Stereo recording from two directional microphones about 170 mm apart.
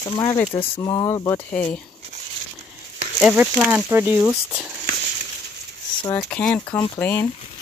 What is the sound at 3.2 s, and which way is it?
Speech, 5° right (ahead or behind).